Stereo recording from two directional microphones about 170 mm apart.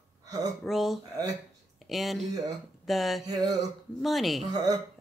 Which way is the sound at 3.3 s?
20° right (ahead or behind).